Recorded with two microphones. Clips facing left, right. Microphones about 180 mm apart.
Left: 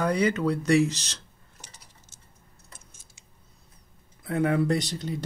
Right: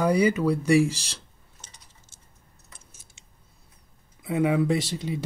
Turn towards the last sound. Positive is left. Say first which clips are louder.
# right 1 dB
turn(degrees=-5)  # may be behind; listen again after turning